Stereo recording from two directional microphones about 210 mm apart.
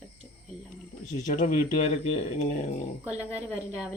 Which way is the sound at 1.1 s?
35° left (ahead or behind).